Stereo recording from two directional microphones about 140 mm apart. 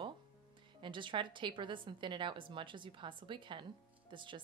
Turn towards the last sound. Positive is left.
turn(degrees=-35)  # may be behind; listen again after turning